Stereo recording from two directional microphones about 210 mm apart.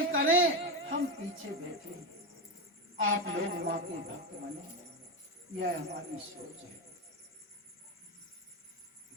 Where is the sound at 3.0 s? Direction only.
65° right (ahead or behind).